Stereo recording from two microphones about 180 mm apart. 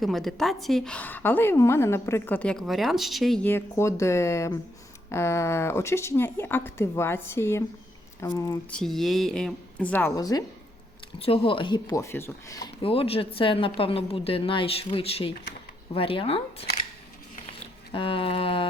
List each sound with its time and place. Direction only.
0.0 s a woman's voice: centre (ahead or behind); by 8.5 s 15° left (ahead or behind)
8.7 s a woman's voice: centre (ahead or behind)
10.2 s speech: 20° left (ahead or behind)
11.2 s speech: 30° left (ahead or behind)
12.8 s a woman's voice: 30° left (ahead or behind)
17.9 s speech: 30° left (ahead or behind)